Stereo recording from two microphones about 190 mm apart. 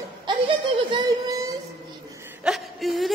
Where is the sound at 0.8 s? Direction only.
20° right (ahead or behind).